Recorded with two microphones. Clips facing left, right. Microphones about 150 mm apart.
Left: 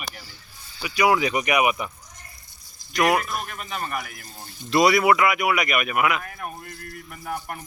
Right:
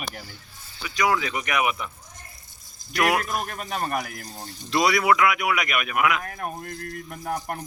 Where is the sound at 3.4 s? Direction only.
40° right (ahead or behind).